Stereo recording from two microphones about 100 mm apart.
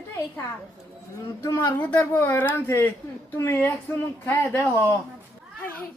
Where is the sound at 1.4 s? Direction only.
35° left (ahead or behind).